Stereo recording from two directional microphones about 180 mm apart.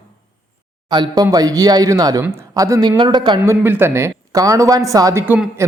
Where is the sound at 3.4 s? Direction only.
10° right (ahead or behind).